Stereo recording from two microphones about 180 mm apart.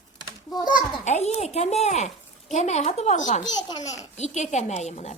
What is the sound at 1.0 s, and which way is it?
A woman's voice, 40° left (ahead or behind).